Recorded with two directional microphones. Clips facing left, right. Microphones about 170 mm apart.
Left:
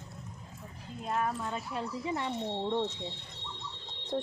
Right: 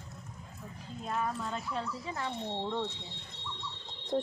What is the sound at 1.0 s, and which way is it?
Speech, 5° left (ahead or behind).